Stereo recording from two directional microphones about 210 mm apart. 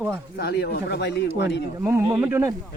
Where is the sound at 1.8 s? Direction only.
10° right (ahead or behind).